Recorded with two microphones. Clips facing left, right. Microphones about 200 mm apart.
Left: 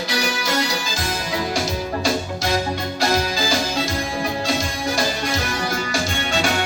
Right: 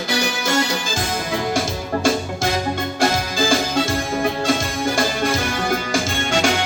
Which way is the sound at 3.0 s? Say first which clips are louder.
Right 1 dB; 50° right (ahead or behind).